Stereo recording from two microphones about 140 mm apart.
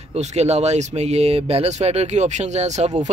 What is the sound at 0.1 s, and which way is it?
Speech, 50° right (ahead or behind).